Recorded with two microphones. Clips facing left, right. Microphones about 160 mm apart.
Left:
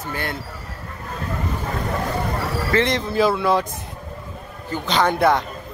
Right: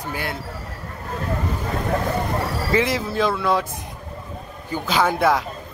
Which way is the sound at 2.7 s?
5° right (ahead or behind).